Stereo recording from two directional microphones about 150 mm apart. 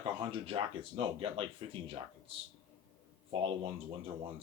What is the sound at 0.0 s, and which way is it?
Speech, 35° right (ahead or behind).